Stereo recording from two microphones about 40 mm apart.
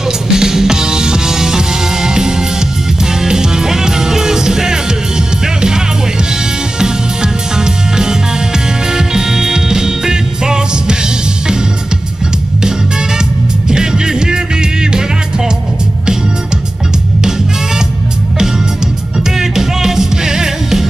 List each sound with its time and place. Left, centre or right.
0.3 s music: centre
6.8 s music: centre
13.7 s music: centre
19.1 s music: centre